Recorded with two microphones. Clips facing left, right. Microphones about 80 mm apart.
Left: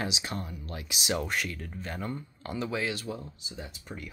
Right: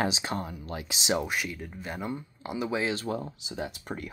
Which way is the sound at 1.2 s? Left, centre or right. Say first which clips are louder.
Right 1 dB; centre.